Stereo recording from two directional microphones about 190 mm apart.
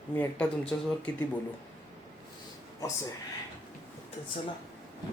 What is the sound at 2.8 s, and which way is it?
Speech, 15° left (ahead or behind).